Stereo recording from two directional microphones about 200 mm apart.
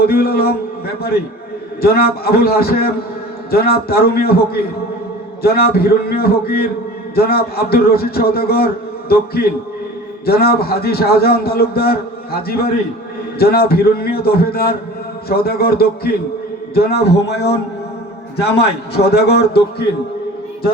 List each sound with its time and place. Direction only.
0.0 s a man's voice: 50° left (ahead or behind)
17.2 s a man's voice: 55° left (ahead or behind)